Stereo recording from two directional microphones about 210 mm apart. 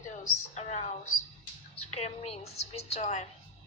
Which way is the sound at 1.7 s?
30° left (ahead or behind).